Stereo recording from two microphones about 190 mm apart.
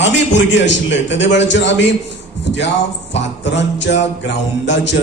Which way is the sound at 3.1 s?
70° left (ahead or behind).